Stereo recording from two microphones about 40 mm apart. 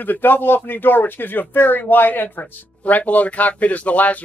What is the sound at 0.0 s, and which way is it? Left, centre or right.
Speech, left.